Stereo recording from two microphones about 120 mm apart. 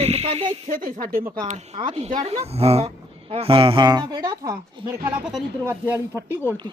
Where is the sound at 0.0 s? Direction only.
60° right (ahead or behind).